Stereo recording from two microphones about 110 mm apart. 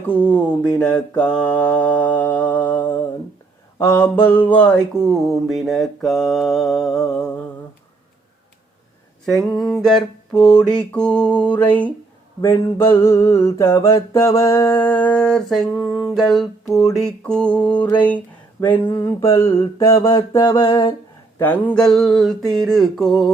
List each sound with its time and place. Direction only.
0.1 s a sound: 10° left (ahead or behind)
3.8 s mantra: 25° left (ahead or behind)
4.6 s mantra: 5° left (ahead or behind)
9.2 s mantra: centre (ahead or behind)
10.6 s a sound: 5° left (ahead or behind)
12.4 s mantra: 25° left (ahead or behind)
13.0 s a sound: 25° left (ahead or behind); by 16.7 s centre (ahead or behind)
16.8 s mantra: 5° left (ahead or behind)
17.7 s a sound: 15° left (ahead or behind)
19.0 s mantra: 25° left (ahead or behind)
20.0 s mantra: 35° left (ahead or behind)
21.3 s mantra: 15° left (ahead or behind)